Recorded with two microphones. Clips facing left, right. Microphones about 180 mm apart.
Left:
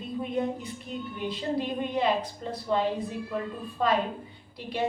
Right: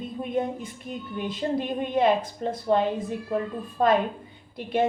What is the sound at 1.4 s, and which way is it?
A woman's voice, 45° right (ahead or behind).